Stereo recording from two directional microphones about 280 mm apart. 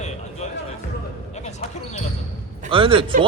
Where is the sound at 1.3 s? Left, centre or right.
Left.